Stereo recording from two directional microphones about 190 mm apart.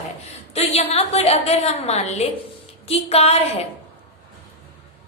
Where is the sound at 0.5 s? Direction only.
30° left (ahead or behind).